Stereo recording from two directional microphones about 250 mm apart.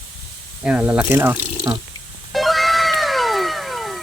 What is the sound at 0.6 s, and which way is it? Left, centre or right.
Speech, centre.